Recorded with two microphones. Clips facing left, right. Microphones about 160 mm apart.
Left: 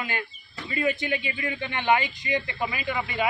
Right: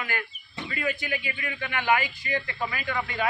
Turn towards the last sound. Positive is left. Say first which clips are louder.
# left 2 dB
turn(degrees=15)  # may be behind; listen again after turning